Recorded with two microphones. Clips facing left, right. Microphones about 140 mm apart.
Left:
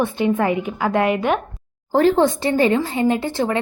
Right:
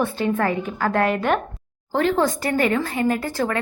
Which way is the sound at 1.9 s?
35° left (ahead or behind).